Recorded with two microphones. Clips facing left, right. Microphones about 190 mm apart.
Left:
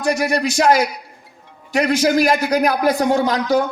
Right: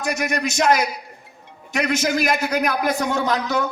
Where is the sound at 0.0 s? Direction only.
35° left (ahead or behind).